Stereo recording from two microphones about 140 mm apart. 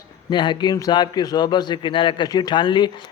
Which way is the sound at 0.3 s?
35° left (ahead or behind).